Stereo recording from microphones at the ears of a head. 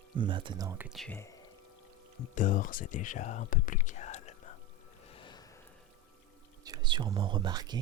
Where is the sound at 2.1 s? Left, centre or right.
Left.